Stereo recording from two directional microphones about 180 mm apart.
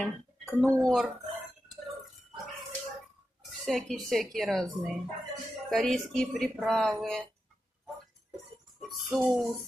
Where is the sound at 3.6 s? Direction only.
Centre (ahead or behind).